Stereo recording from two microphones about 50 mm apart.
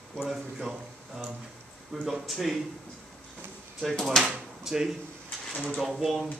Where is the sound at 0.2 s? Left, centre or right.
Centre.